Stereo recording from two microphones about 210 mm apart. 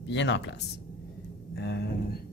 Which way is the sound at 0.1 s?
60° left (ahead or behind).